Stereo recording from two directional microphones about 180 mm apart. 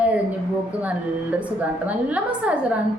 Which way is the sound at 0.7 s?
5° right (ahead or behind).